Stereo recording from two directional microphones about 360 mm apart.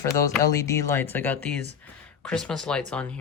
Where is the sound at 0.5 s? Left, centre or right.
Centre.